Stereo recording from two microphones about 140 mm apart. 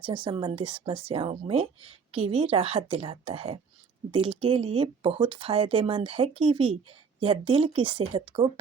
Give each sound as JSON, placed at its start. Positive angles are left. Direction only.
{"t": 0.0, "sound": "speech", "side_deg": -35}